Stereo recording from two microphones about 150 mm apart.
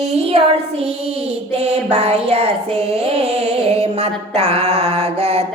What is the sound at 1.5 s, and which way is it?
Music, 45° right (ahead or behind).